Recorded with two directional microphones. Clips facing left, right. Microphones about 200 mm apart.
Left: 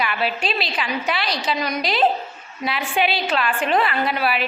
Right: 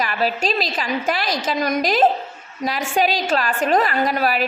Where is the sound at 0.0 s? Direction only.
40° right (ahead or behind).